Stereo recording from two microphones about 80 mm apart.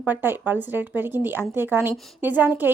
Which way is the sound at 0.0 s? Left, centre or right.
Right.